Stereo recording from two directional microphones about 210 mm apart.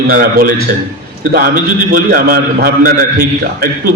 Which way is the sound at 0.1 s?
45° right (ahead or behind).